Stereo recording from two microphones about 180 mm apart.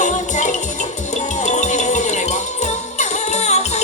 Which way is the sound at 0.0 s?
45° left (ahead or behind).